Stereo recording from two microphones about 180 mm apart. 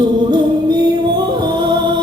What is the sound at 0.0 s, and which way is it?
Music, 25° right (ahead or behind).